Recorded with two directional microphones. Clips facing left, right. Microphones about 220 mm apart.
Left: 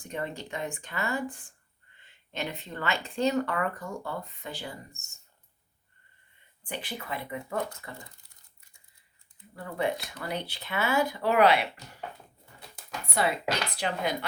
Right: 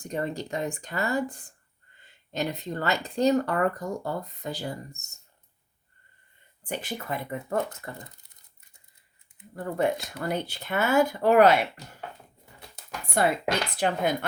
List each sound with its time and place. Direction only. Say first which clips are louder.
0.1 s speech: right 5 dB; 40° right (ahead or behind)
6.7 s speech: right 4 dB; 45° right (ahead or behind)
9.6 s speech: right 4 dB; 45° right (ahead or behind)
13.2 s speech: right 3 dB; 50° right (ahead or behind)